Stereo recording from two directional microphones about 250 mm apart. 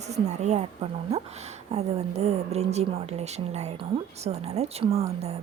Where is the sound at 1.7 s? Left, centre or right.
Right.